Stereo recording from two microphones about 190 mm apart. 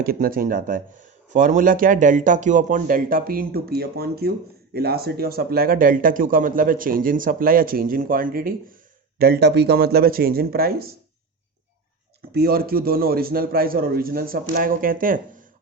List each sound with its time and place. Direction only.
0.0 s speech: 50° right (ahead or behind)
12.3 s speech: 55° right (ahead or behind)